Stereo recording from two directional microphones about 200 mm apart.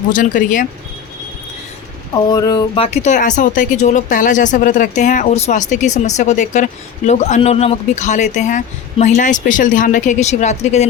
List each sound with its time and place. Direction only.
0.1 s speech: 40° left (ahead or behind)
2.1 s speech: 20° left (ahead or behind)